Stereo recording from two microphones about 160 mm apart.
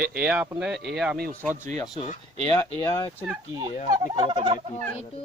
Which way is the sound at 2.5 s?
20° left (ahead or behind).